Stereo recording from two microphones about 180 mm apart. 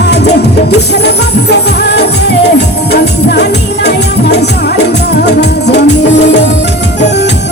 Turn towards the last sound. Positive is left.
turn(degrees=70)  # may be behind; listen again after turning